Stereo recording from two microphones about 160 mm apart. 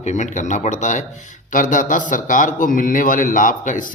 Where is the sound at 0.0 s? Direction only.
45° left (ahead or behind).